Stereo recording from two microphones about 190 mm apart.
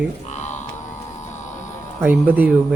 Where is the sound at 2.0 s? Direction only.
10° right (ahead or behind).